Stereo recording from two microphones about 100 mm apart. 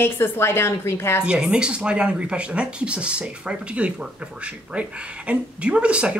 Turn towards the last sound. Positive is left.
turn(degrees=-10)  # may be behind; listen again after turning